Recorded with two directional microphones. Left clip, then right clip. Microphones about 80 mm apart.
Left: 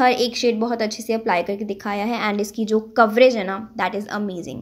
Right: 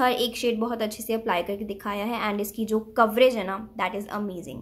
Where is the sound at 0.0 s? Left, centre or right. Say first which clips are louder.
Left 6 dB; left.